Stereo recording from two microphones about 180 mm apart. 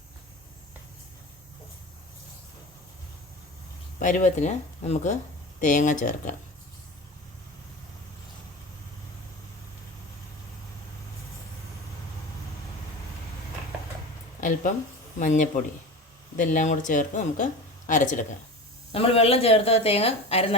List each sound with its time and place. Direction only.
4.0 s speech: 45° left (ahead or behind)
15.2 s speech: 45° left (ahead or behind)
18.9 s a woman's voice: 35° left (ahead or behind)